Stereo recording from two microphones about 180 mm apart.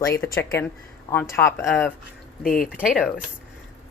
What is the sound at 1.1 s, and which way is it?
Speech, 15° left (ahead or behind).